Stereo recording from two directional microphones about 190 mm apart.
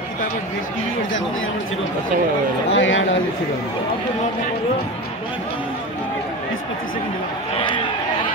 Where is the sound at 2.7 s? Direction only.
85° left.